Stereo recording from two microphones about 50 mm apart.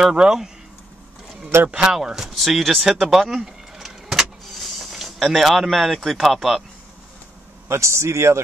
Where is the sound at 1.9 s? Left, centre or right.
Centre.